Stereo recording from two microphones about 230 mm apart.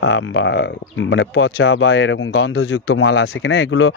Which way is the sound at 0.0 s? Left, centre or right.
Left.